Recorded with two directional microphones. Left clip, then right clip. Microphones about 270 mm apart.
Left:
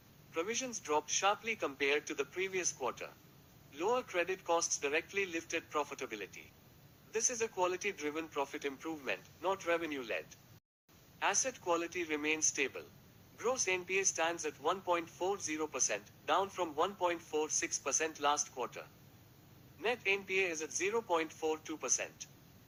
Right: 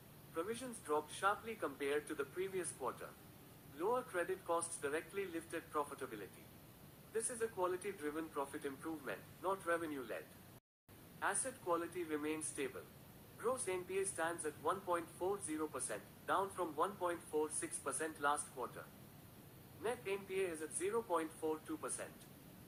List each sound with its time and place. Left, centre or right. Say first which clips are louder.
0.3 s speech: left 6 dB; left
13.4 s speech: left 6 dB; left
19.8 s speech: left 8 dB; left